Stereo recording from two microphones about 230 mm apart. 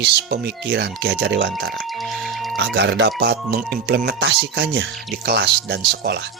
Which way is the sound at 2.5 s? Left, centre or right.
Right.